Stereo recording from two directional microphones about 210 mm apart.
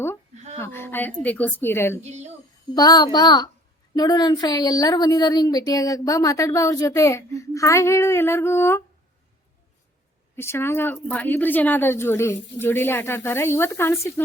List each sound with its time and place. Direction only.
0.6 s a woman's voice: 10° left (ahead or behind)
2.0 s a woman's voice: 30° right (ahead or behind)
2.7 s a child's voice: 20° left (ahead or behind)
10.3 s speech: 10° left (ahead or behind)